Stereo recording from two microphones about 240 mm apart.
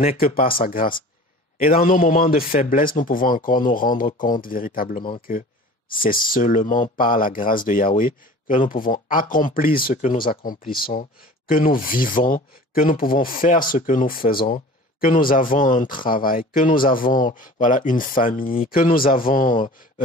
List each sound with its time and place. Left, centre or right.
0.0 s speech: left